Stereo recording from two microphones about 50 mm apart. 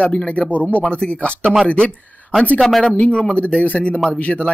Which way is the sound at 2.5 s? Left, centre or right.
Centre.